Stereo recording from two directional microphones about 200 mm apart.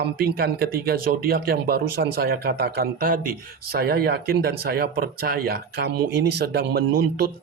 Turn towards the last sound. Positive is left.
turn(degrees=-50)  # may be behind; listen again after turning